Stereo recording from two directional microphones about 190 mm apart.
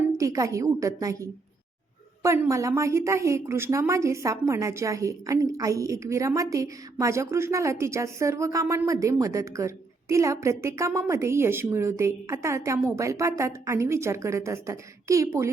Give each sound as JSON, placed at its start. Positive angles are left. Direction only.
{"t": 0.2, "sound": "a woman's voice", "side_deg": -15}